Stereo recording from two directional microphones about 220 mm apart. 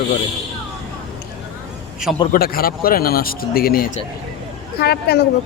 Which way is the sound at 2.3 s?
40° left (ahead or behind).